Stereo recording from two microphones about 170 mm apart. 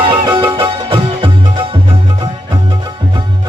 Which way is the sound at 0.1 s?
30° right (ahead or behind).